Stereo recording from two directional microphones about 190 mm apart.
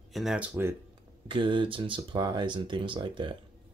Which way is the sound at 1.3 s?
25° right (ahead or behind).